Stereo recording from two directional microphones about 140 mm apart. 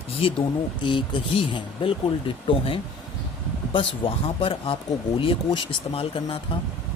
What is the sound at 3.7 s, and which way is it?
Speech, 40° left (ahead or behind).